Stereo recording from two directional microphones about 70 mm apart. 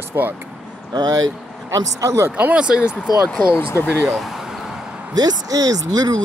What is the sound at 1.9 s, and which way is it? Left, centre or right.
Speech, right.